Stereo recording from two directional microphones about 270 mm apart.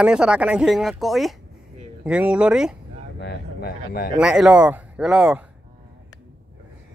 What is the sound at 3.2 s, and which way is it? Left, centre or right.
Speech, left.